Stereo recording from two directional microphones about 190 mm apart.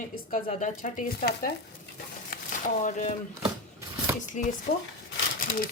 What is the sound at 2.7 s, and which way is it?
Speech, 40° left (ahead or behind).